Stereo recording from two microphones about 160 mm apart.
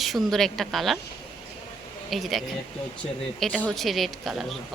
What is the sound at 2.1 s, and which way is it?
A woman's voice, centre (ahead or behind).